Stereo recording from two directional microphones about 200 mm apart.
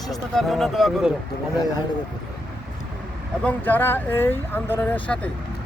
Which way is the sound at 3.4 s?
10° left (ahead or behind).